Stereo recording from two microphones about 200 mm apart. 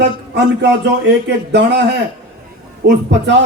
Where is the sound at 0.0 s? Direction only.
60° right (ahead or behind).